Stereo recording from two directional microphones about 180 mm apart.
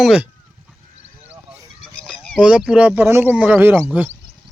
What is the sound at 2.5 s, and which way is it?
Speech, 5° right (ahead or behind).